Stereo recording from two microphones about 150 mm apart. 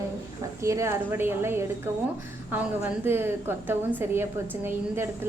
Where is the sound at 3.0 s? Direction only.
15° right (ahead or behind).